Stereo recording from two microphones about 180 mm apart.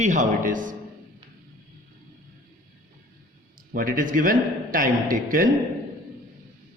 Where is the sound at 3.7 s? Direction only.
50° right (ahead or behind).